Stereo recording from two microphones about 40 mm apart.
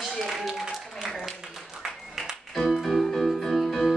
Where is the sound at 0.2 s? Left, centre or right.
Centre.